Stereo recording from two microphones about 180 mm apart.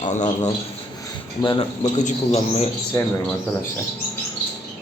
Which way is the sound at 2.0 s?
40° left (ahead or behind).